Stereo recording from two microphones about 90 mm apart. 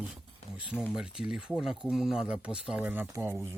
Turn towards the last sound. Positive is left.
turn(degrees=-30)  # may be behind; listen again after turning